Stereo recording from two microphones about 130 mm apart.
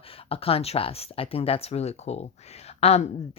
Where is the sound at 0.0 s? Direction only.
45° left (ahead or behind).